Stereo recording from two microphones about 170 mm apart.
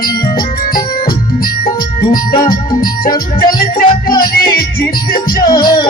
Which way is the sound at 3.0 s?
60° left (ahead or behind).